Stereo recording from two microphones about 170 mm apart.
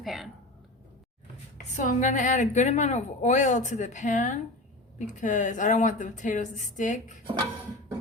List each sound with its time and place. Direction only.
0.0 s speech: centre (ahead or behind)
1.7 s a woman's voice: 45° left (ahead or behind)